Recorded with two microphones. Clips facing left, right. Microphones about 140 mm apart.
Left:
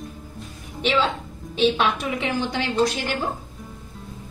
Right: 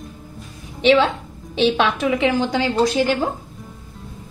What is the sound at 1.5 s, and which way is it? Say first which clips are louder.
Speech: right 3 dB; 90° right.